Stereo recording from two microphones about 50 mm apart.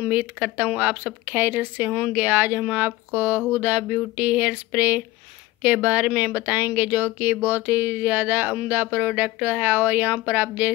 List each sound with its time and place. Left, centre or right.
0.0 s speech: right
6.5 s speech: right